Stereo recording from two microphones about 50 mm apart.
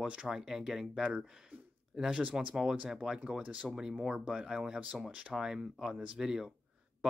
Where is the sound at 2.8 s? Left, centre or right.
Centre.